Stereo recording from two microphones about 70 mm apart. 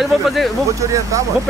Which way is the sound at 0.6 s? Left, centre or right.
Right.